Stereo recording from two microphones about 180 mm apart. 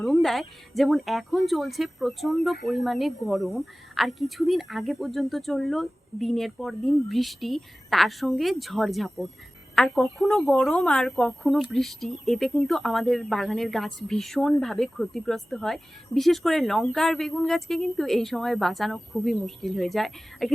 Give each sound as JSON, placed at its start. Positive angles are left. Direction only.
{"t": 0.0, "sound": "a woman's voice", "side_deg": 0}